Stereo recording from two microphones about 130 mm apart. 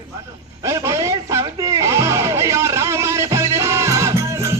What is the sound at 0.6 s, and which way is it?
Music, 25° right (ahead or behind).